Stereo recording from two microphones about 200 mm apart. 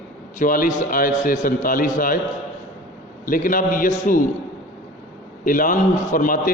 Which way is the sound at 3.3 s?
45° left (ahead or behind).